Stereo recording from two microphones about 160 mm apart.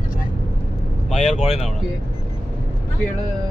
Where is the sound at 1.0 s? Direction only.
45° left (ahead or behind).